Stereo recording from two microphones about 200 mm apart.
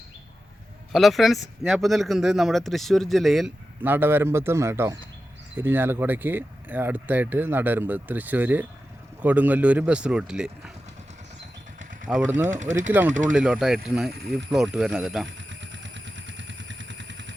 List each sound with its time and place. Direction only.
0.9 s speech: centre (ahead or behind)
12.0 s speech: 5° right (ahead or behind)
12.5 s speech: 40° right (ahead or behind)
12.9 s speech: 10° right (ahead or behind)
14.1 s speech: 55° right (ahead or behind)
14.5 s speech: centre (ahead or behind)
15.4 s vehicle: 65° right (ahead or behind)